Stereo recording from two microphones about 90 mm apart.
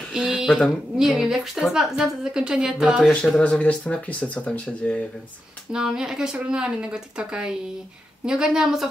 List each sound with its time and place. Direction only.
0.1 s a woman's voice: 10° right (ahead or behind)
3.1 s speech: 10° left (ahead or behind)
5.7 s speech: 10° right (ahead or behind)